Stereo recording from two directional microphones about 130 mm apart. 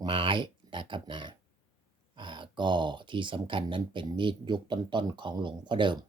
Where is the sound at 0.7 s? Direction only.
40° right (ahead or behind).